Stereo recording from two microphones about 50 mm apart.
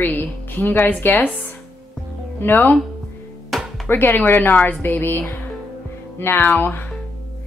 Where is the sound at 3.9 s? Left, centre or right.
Left.